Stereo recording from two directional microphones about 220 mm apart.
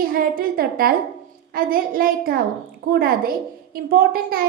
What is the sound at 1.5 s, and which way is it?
A woman's voice, 40° right (ahead or behind).